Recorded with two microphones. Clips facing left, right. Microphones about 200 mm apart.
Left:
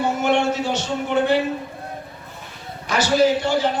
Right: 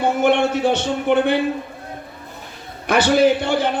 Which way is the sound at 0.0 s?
55° right (ahead or behind).